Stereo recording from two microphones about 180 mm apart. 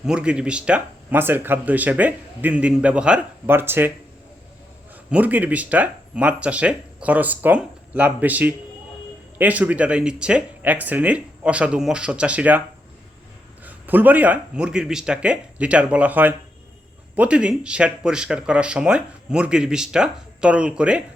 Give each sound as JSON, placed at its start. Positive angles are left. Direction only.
{"t": 0.0, "sound": "speech", "side_deg": -5}
{"t": 5.1, "sound": "speech", "side_deg": -10}
{"t": 13.7, "sound": "speech", "side_deg": -10}